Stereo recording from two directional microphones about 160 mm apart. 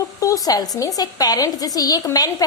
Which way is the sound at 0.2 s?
20° left (ahead or behind).